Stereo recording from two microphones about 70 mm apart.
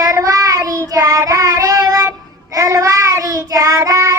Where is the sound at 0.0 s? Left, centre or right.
Right.